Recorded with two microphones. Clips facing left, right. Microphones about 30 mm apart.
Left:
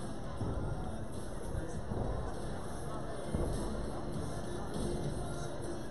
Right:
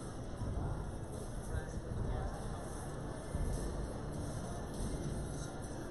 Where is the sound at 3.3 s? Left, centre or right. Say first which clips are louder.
Left 7 dB; left.